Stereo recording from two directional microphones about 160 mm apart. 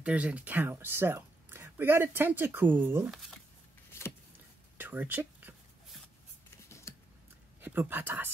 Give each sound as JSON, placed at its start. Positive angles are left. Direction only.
{"t": 0.0, "sound": "speech", "side_deg": -10}
{"t": 3.1, "sound": "speech", "side_deg": 0}
{"t": 3.9, "sound": "vehicle", "side_deg": 15}
{"t": 4.7, "sound": "whispering", "side_deg": -10}
{"t": 7.6, "sound": "speech", "side_deg": -10}